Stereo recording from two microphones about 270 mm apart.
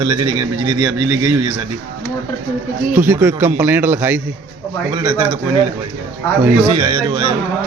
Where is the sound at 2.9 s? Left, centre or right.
Centre.